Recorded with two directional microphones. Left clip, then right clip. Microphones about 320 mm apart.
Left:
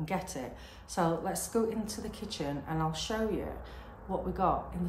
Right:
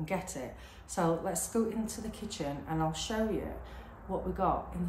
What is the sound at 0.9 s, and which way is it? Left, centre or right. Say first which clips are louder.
A woman's voice: even; centre.